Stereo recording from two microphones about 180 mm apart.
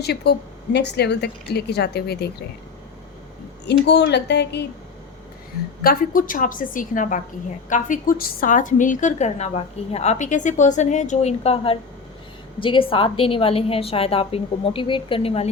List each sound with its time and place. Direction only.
0.0 s a woman's voice: 65° left (ahead or behind)
3.7 s speech: 70° left (ahead or behind)
5.8 s a woman's voice: 55° left (ahead or behind); by 15.4 s 30° left (ahead or behind)